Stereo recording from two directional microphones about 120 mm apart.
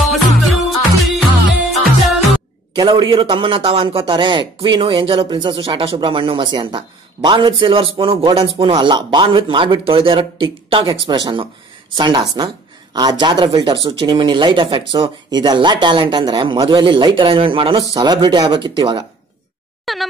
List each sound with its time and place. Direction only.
0.1 s music: centre (ahead or behind)
2.7 s a man's voice: 40° right (ahead or behind)
19.8 s a sound: centre (ahead or behind)